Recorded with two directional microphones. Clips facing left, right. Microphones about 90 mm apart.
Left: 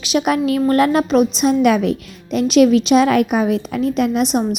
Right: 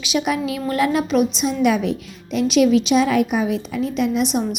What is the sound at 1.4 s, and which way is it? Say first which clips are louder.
A woman's voice: left 4 dB; 60° left (ahead or behind).